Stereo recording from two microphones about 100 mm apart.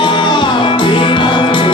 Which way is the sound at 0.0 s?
55° left (ahead or behind).